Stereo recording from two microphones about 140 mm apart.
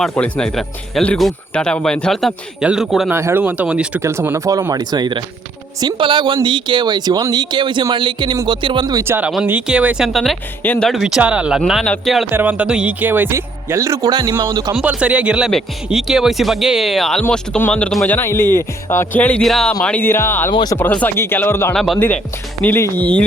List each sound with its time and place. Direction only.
0.1 s speech: 10° left (ahead or behind)
3.1 s speech: 15° right (ahead or behind)
9.0 s speech: 15° right (ahead or behind)
12.3 s speech: 15° right (ahead or behind); by 14.8 s 30° right (ahead or behind)
14.8 s speech: 10° right (ahead or behind); by 20.5 s 15° left (ahead or behind)
20.5 s speech: 35° left (ahead or behind)
20.7 s speech: 10° left (ahead or behind)